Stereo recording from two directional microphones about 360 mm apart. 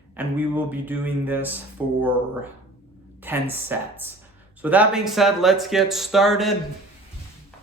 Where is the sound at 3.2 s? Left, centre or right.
Centre.